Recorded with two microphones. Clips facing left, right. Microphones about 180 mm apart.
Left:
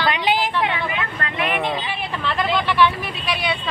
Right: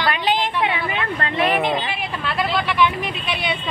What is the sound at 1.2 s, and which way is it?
Speech, 35° right (ahead or behind).